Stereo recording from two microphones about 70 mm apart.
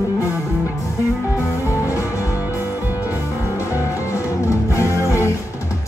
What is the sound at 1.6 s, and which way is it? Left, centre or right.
Music, left.